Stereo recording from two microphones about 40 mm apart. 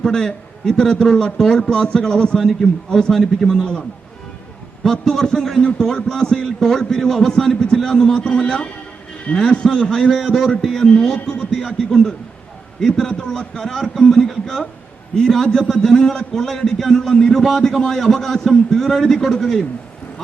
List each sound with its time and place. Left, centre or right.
0.0 s a man's voice: centre
4.8 s a man's voice: centre
13.7 s a man's voice: centre